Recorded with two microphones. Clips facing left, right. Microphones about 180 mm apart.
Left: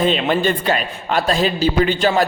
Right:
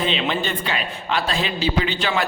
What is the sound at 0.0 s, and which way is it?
A man's voice, 45° left (ahead or behind).